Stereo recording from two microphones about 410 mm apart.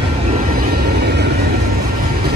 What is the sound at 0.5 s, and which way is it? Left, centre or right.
Vehicle, right.